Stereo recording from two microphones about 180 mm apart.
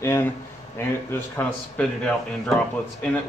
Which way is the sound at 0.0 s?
15° left (ahead or behind).